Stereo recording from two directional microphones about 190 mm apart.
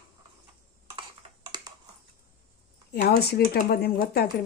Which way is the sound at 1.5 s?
20° right (ahead or behind).